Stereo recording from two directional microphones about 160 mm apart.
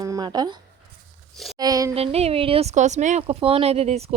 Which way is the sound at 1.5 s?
25° right (ahead or behind).